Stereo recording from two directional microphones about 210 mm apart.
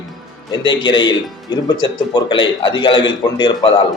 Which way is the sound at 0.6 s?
20° left (ahead or behind).